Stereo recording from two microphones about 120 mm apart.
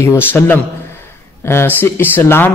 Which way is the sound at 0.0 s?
20° left (ahead or behind).